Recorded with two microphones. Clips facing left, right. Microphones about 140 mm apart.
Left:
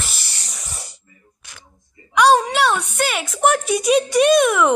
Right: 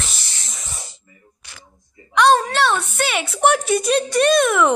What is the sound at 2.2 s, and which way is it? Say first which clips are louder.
A woman's voice: left 1 dB; 10° left (ahead or behind).